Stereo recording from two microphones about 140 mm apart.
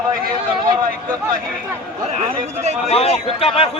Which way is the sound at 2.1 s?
50° right (ahead or behind).